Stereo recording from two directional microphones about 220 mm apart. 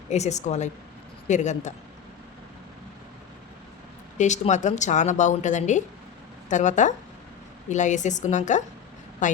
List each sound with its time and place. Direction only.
0.1 s a woman's voice: 30° left (ahead or behind)
4.2 s a woman's voice: 35° left (ahead or behind)